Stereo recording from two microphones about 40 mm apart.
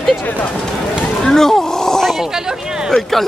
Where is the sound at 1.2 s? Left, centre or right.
Centre.